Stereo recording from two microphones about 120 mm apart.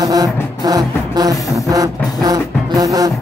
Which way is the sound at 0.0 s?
30° right (ahead or behind).